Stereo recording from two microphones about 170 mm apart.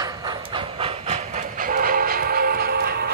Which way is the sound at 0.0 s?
20° right (ahead or behind).